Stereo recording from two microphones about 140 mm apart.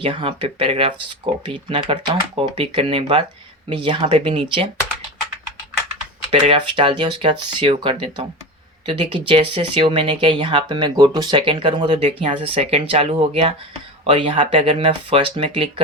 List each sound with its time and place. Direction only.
0.0 s speech: 40° right (ahead or behind)
6.3 s speech: 40° right (ahead or behind)